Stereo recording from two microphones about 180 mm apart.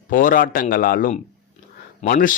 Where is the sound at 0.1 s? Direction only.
50° left (ahead or behind).